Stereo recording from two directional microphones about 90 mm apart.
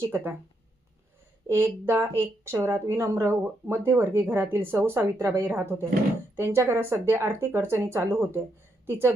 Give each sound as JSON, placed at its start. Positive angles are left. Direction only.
{"t": 0.0, "sound": "speech", "side_deg": -25}
{"t": 1.5, "sound": "speech", "side_deg": -25}
{"t": 2.6, "sound": "speech", "side_deg": -40}